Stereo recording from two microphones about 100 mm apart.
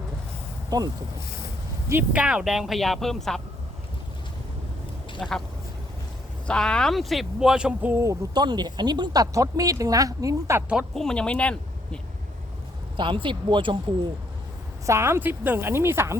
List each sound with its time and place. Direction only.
0.7 s speech: 45° right (ahead or behind)
2.1 s speech: 10° right (ahead or behind)
5.2 s speech: 5° left (ahead or behind)
6.5 s speech: 10° left (ahead or behind); by 8.0 s 15° right (ahead or behind)
8.3 s speech: 45° right (ahead or behind)
10.9 s speech: 5° left (ahead or behind)
13.0 s speech: 55° right (ahead or behind)
14.8 s speech: 25° right (ahead or behind)